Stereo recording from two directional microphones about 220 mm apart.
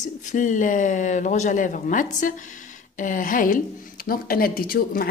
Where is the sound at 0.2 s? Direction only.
35° left (ahead or behind).